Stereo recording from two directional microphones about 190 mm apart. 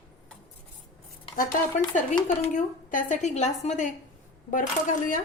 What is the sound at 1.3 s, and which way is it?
A woman's voice, 40° left (ahead or behind).